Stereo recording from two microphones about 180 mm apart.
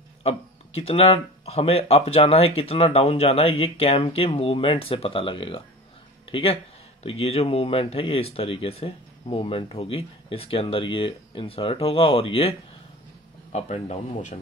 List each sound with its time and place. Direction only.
0.2 s speech: 35° left (ahead or behind)